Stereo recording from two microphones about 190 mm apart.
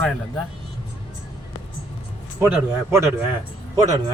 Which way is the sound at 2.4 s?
10° right (ahead or behind).